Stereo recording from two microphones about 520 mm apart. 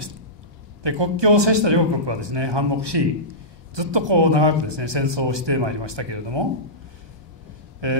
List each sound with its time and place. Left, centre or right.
0.8 s a man's voice: right
7.8 s speech: right